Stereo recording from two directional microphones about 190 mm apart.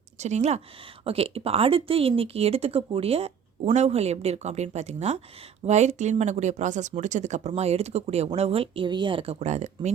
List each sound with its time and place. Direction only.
0.2 s speech: 35° right (ahead or behind)